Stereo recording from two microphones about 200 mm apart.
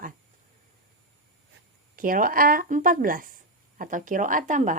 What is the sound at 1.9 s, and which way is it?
A woman's voice, 45° right (ahead or behind).